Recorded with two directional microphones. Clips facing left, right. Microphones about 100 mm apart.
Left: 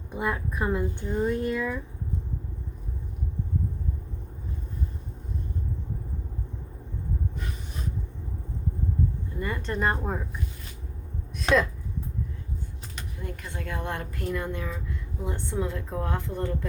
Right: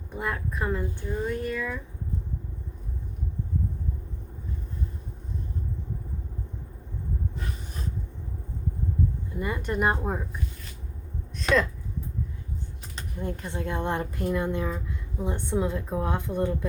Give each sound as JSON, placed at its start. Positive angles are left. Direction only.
{"t": 0.1, "sound": "a woman's voice", "side_deg": 10}
{"t": 9.4, "sound": "a woman's voice", "side_deg": -15}
{"t": 13.0, "sound": "a woman's voice", "side_deg": -30}